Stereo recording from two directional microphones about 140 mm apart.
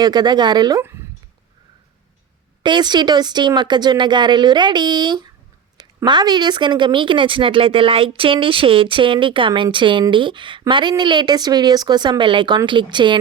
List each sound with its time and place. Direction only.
0.0 s speech: 30° right (ahead or behind)
2.6 s speech: 30° right (ahead or behind)